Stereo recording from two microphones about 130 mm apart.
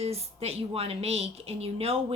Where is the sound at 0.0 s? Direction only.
50° right (ahead or behind).